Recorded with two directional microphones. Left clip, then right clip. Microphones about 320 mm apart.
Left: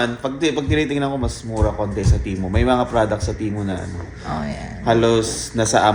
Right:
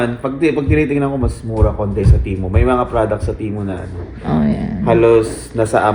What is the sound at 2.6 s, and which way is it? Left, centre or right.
Speech, left.